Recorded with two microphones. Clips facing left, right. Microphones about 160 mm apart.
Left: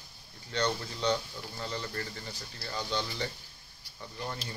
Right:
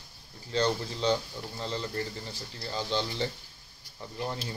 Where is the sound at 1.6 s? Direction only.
30° right (ahead or behind).